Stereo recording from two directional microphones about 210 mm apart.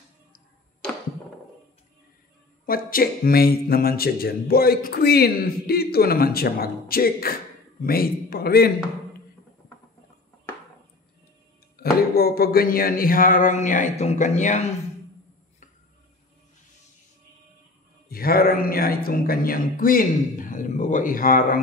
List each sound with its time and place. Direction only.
2.6 s speech: 45° left (ahead or behind)
11.8 s a sound: 45° left (ahead or behind)
18.0 s speech: 45° left (ahead or behind)